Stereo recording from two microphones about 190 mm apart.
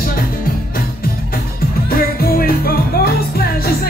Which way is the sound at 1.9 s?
50° left (ahead or behind).